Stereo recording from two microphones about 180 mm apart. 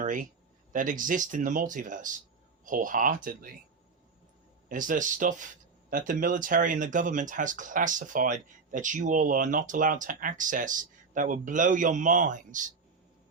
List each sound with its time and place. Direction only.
0.0 s speech: 45° right (ahead or behind)
4.7 s speech: 45° right (ahead or behind)